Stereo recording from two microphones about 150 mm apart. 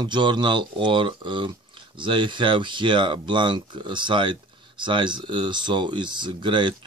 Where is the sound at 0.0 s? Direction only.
30° right (ahead or behind).